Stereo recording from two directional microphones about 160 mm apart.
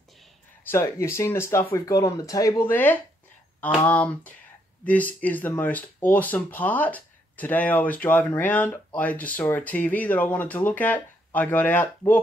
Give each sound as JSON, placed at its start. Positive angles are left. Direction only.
{"t": 0.7, "sound": "speech", "side_deg": 15}